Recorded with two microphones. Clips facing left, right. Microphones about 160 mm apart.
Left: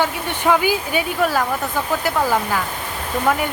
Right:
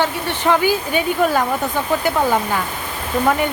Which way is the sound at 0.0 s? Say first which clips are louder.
Right 1 dB; 10° left (ahead or behind).